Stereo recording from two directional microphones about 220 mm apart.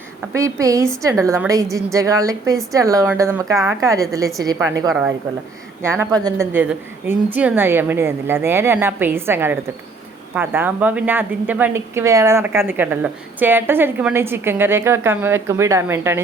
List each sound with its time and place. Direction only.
0.3 s a woman's voice: 15° right (ahead or behind)